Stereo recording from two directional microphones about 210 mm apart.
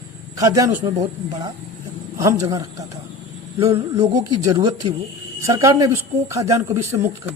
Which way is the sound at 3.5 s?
20° right (ahead or behind).